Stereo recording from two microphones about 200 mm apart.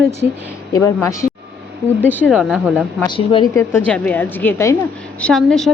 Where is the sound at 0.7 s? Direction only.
15° left (ahead or behind).